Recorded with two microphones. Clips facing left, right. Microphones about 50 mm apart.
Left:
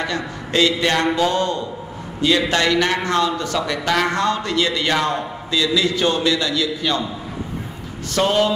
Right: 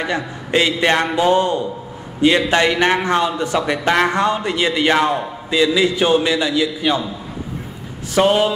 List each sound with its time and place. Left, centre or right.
0.0 s a man's voice: centre
8.1 s speech: centre